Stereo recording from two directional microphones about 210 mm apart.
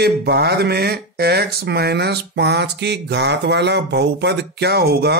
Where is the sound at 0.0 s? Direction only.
50° right (ahead or behind).